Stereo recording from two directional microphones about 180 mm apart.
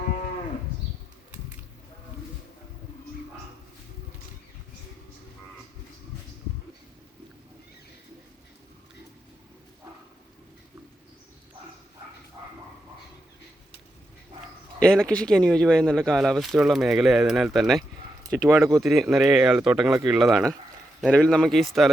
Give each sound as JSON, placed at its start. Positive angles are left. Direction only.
{"t": 14.8, "sound": "speech", "side_deg": 5}
{"t": 18.3, "sound": "speech", "side_deg": -15}
{"t": 18.8, "sound": "speech", "side_deg": 0}